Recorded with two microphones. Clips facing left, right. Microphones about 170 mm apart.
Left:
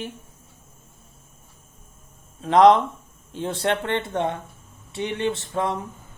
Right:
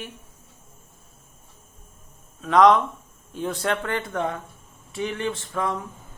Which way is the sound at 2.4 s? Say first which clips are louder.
Left 2 dB; 30° left (ahead or behind).